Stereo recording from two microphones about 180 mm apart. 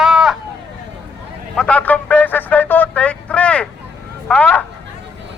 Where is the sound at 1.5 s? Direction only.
5° left (ahead or behind).